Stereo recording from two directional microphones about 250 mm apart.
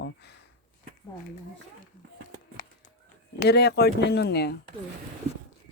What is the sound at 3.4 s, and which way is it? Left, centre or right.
A man's voice, left.